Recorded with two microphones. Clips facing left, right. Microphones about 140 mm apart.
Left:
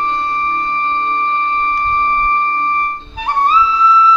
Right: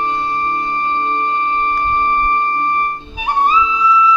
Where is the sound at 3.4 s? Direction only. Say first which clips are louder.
Left 2 dB; 10° right (ahead or behind).